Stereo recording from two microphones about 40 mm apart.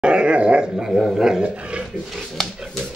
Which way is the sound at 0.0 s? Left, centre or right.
Right.